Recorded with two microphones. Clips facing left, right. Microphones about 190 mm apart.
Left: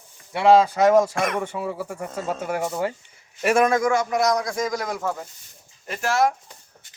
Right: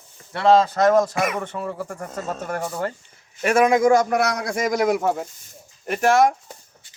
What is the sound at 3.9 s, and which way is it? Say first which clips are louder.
Speech: right 5 dB; 40° right (ahead or behind).